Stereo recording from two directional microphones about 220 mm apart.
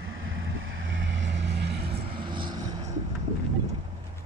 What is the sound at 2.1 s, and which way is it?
Vehicle, 20° right (ahead or behind).